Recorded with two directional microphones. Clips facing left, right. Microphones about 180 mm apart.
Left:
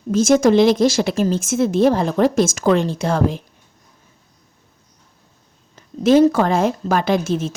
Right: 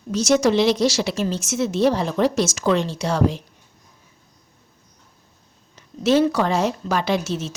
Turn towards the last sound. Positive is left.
turn(degrees=50)  # may be behind; listen again after turning